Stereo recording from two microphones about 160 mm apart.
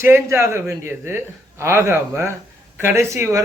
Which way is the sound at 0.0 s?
15° right (ahead or behind).